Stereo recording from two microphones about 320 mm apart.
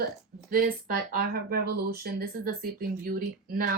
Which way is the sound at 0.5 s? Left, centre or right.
Right.